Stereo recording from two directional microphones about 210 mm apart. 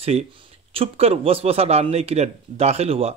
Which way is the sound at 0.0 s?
30° right (ahead or behind).